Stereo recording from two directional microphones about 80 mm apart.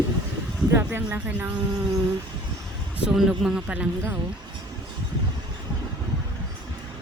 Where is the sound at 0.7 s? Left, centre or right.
Right.